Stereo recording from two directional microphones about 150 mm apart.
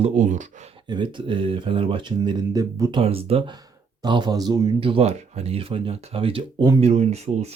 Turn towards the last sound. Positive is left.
turn(degrees=-45)  # may be behind; listen again after turning